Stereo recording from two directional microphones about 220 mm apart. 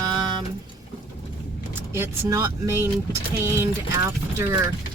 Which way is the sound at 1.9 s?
10° right (ahead or behind).